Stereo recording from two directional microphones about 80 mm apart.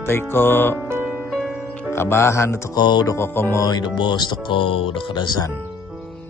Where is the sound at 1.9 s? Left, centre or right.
Left.